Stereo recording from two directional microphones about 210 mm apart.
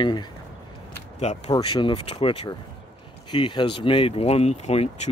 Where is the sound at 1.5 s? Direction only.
25° left (ahead or behind).